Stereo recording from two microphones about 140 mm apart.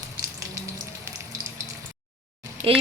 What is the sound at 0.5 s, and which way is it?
Frying, 25° right (ahead or behind).